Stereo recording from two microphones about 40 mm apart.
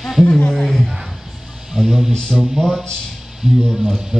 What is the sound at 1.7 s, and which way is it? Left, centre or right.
Speech, centre.